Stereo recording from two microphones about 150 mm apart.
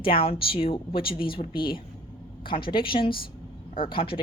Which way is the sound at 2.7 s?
35° left (ahead or behind).